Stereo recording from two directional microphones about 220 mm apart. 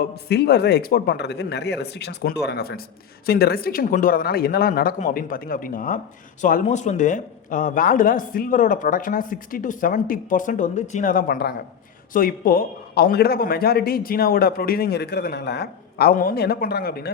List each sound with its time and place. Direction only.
0.3 s a man's voice: 50° left (ahead or behind)